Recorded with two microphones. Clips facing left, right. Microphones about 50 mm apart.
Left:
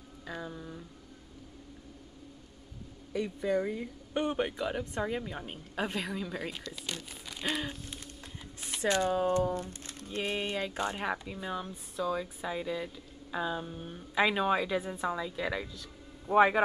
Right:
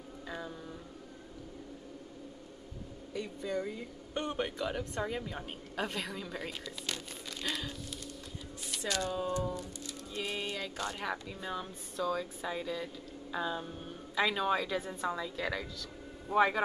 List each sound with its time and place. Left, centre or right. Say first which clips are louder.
0.3 s mantra: left 2 dB; centre
3.1 s speech: left 6 dB; left
4.1 s a woman's voice: left 4 dB; centre
7.4 s speech: left 4 dB; left
8.7 s speech: left 6 dB; left
9.1 s speech: left 6 dB; left
11.3 s a woman's voice: left 2 dB; centre
13.8 s a woman's voice: left 3 dB; centre
15.8 s a sound: right 3 dB; centre